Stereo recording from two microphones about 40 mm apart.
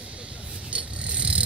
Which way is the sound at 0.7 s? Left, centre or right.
Right.